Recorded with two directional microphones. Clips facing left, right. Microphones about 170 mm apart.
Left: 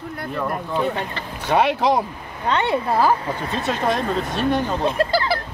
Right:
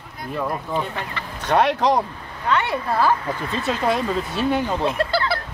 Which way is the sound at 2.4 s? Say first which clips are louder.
Left 2 dB; 30° left (ahead or behind).